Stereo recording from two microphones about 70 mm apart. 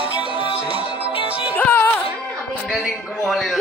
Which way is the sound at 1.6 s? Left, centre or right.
Left.